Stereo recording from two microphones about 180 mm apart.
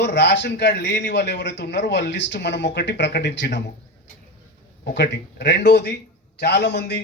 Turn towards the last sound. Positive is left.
turn(degrees=70)  # may be behind; listen again after turning